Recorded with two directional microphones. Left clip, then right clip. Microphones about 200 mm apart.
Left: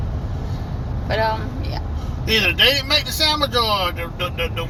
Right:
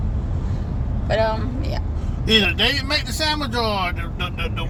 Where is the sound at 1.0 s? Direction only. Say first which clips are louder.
Even; 15° right (ahead or behind).